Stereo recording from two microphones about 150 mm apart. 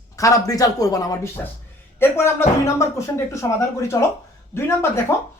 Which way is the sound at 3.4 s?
25° left (ahead or behind).